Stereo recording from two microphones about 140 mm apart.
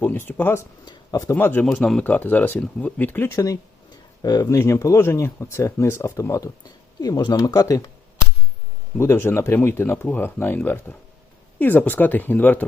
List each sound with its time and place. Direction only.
0.0 s speech: 15° left (ahead or behind)
9.0 s speech: 15° left (ahead or behind)